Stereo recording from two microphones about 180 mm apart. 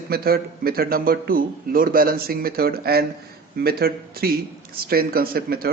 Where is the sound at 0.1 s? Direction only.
55° right (ahead or behind).